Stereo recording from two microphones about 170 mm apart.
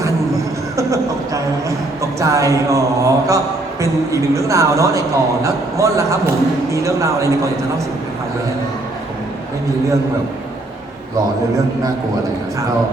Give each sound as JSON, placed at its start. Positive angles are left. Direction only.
{"t": 0.8, "sound": "a man's voice", "side_deg": -20}